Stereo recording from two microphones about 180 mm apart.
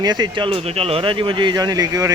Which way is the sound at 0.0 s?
25° right (ahead or behind).